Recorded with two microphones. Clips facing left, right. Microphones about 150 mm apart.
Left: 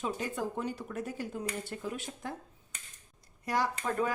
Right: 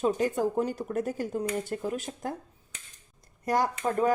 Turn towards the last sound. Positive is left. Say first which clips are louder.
# right 6 dB
turn(degrees=-45)  # may be behind; listen again after turning